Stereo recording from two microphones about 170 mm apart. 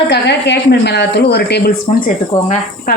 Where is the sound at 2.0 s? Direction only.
55° left (ahead or behind).